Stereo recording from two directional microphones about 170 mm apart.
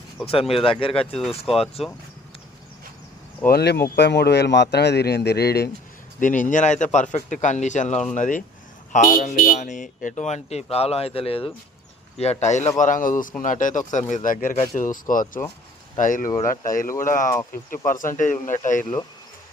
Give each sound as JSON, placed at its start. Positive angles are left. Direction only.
{"t": 0.3, "sound": "speech", "side_deg": 35}
{"t": 3.4, "sound": "a man's voice", "side_deg": 65}
{"t": 6.1, "sound": "speech", "side_deg": 50}